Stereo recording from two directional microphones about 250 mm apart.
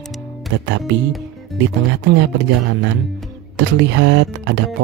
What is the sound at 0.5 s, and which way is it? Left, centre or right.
Speech, right.